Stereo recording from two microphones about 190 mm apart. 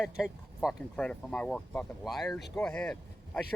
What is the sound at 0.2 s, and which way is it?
Speech, 5° right (ahead or behind).